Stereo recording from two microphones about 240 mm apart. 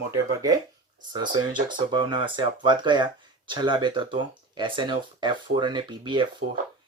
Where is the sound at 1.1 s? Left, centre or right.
Centre.